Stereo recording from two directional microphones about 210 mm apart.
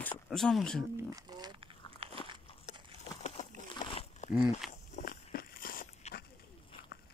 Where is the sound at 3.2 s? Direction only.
30° left (ahead or behind).